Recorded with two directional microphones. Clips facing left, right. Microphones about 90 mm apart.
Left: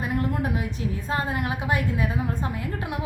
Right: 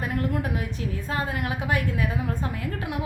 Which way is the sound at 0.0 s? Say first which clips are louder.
Left 1 dB; 25° left (ahead or behind).